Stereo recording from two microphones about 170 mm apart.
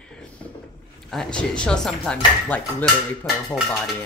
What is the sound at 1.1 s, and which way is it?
Speech, 5° left (ahead or behind).